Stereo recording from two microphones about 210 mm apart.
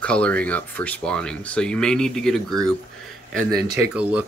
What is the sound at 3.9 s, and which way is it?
Speech, 5° right (ahead or behind).